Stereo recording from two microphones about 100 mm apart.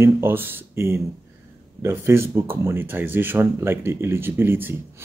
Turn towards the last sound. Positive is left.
turn(degrees=-25)  # may be behind; listen again after turning